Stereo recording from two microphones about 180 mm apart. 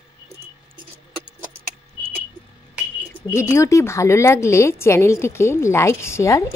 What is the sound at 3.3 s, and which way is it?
Speech, 15° left (ahead or behind).